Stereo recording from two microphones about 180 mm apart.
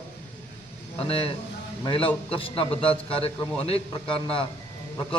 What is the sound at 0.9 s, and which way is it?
A man's voice, 35° left (ahead or behind).